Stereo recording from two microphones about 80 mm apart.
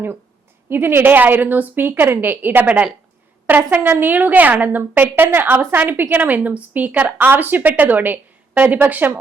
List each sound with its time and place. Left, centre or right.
0.7 s a woman's voice: right